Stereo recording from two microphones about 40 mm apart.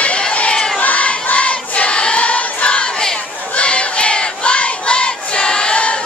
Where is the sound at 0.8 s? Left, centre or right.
Left.